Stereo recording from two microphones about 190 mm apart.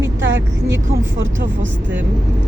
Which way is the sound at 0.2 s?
75° right (ahead or behind).